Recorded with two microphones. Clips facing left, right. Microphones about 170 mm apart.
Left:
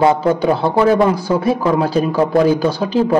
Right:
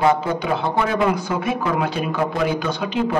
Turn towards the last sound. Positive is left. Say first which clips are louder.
# left 6 dB
turn(degrees=35)  # may be behind; listen again after turning